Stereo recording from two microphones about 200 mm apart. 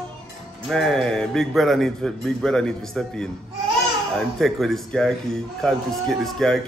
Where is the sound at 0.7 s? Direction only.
5° left (ahead or behind).